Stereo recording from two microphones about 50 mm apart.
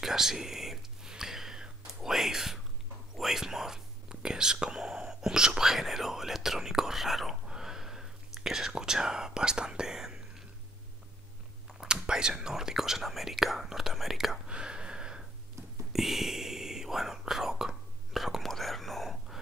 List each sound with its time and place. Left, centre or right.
0.0 s whispering: centre
3.2 s speech: centre
11.8 s speech: centre
14.4 s gasp: centre
15.9 s whispering: centre